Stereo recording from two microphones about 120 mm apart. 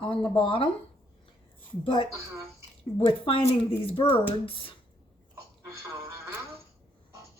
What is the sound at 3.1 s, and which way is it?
Speech, 45° left (ahead or behind).